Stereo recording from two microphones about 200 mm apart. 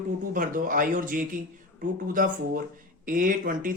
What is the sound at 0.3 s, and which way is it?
Speech, 45° right (ahead or behind).